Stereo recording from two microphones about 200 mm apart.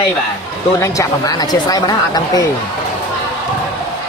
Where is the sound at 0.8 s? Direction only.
15° left (ahead or behind).